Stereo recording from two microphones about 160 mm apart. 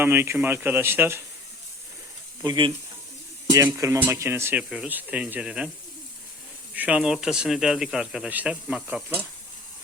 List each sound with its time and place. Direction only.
0.0 s speech: 15° right (ahead or behind)
2.4 s speech: 25° right (ahead or behind); by 5.7 s 5° right (ahead or behind)
6.7 s speech: 5° right (ahead or behind)